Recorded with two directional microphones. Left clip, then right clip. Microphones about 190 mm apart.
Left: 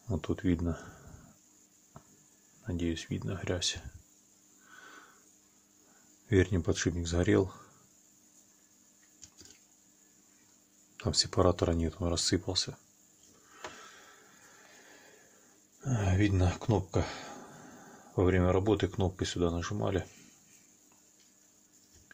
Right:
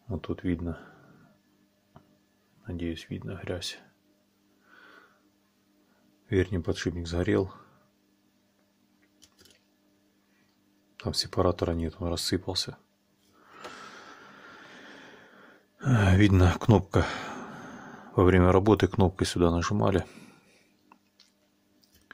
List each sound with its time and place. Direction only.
0.1 s speech: centre (ahead or behind)
2.6 s speech: centre (ahead or behind)
6.2 s speech: 5° right (ahead or behind)
11.0 s speech: 5° right (ahead or behind)
13.7 s a sound: 35° right (ahead or behind)
15.8 s speech: 40° right (ahead or behind)